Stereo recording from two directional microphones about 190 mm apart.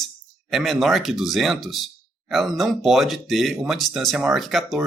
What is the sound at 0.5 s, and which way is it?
Speech, centre (ahead or behind).